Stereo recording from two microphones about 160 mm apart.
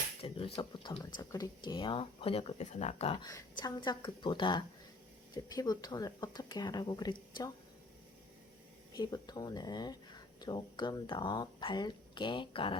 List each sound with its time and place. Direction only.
0.2 s speech: 35° left (ahead or behind)
3.2 s speech: 25° left (ahead or behind)
9.0 s speech: 25° left (ahead or behind)